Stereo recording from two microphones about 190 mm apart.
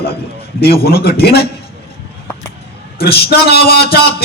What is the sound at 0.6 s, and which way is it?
Speech, 55° left (ahead or behind).